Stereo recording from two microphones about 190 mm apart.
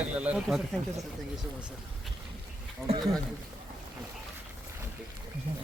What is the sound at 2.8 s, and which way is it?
Speech, 15° right (ahead or behind).